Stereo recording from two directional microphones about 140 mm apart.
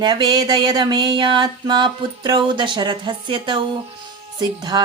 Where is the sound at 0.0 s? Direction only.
30° right (ahead or behind).